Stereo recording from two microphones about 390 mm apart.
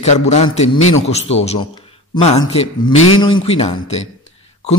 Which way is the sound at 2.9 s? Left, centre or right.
Left.